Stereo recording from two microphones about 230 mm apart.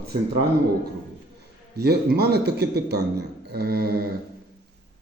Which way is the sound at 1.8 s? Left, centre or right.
Right.